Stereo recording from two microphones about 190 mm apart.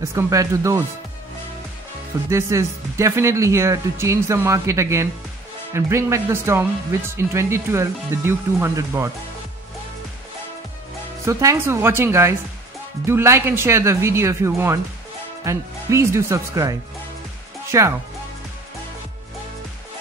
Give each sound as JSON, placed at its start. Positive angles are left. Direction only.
{"t": 0.1, "sound": "speech", "side_deg": -15}
{"t": 2.2, "sound": "speech", "side_deg": -15}
{"t": 11.2, "sound": "speech", "side_deg": -15}